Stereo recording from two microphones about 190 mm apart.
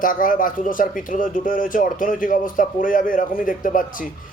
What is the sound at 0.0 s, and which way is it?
A man's voice, 45° left (ahead or behind).